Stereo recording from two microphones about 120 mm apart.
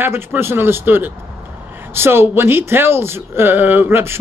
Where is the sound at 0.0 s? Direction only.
20° right (ahead or behind).